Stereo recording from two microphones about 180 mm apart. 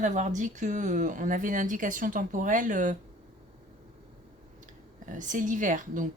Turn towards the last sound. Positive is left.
turn(degrees=-45)  # may be behind; listen again after turning